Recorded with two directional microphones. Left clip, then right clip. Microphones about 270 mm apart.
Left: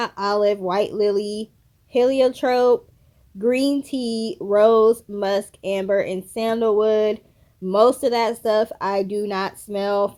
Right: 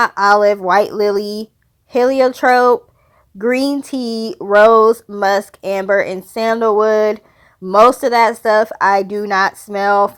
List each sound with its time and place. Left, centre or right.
0.0 s speech: centre
3.9 s speech: right
4.2 s speech: centre